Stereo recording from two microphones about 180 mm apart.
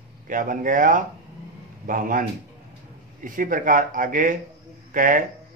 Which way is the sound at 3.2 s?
50° right (ahead or behind).